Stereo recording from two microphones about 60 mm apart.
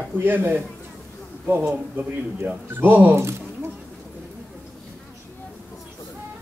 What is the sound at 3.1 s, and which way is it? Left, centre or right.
Speech, right.